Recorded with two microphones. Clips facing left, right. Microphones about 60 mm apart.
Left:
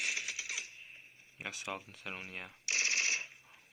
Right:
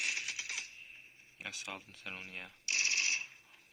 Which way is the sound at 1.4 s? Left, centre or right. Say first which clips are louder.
Left 3 dB; centre.